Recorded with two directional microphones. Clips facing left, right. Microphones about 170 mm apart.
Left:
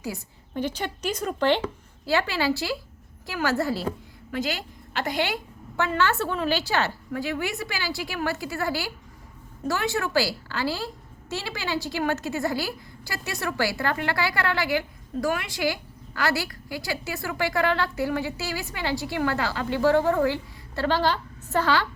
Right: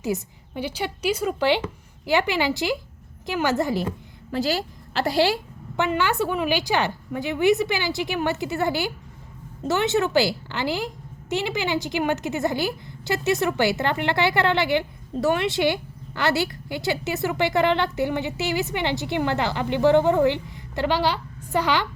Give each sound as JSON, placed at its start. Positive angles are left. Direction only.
{"t": 0.1, "sound": "a woman's voice", "side_deg": -20}
{"t": 0.5, "sound": "a woman's voice", "side_deg": -10}
{"t": 4.3, "sound": "a woman's voice", "side_deg": -35}
{"t": 5.7, "sound": "a woman's voice", "side_deg": -15}